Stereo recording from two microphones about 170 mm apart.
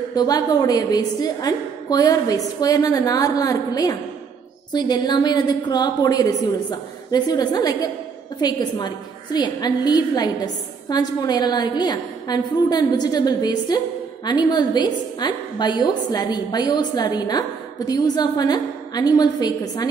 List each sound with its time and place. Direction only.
0.1 s a woman's voice: 25° left (ahead or behind)